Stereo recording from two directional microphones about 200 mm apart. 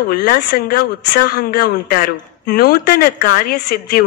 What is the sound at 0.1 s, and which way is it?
Speech, 50° left (ahead or behind).